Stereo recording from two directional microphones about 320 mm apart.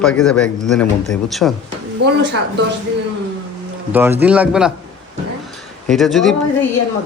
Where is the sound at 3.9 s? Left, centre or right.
Centre.